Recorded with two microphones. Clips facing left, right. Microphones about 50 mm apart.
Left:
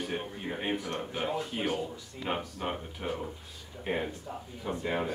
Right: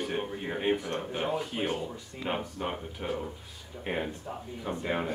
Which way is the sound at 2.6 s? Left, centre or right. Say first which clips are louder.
Right 1 dB; centre.